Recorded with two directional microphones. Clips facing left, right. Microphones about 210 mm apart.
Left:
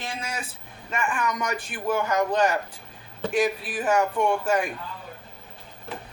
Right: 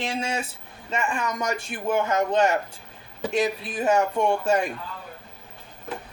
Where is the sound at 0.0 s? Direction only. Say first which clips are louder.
Right 6 dB; 25° right (ahead or behind).